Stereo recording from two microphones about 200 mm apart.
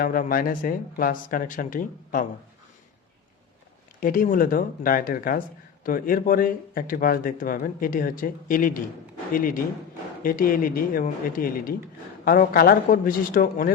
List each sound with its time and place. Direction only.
0.0 s speech: 45° left (ahead or behind)
4.0 s speech: 45° left (ahead or behind)